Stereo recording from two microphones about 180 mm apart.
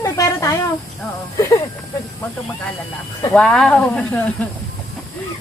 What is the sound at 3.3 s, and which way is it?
Speech, 5° left (ahead or behind).